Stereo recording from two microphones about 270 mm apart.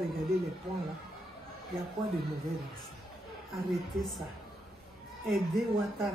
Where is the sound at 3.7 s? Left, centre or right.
Centre.